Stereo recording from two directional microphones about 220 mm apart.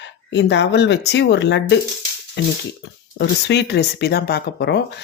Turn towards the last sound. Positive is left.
turn(degrees=45)  # may be behind; listen again after turning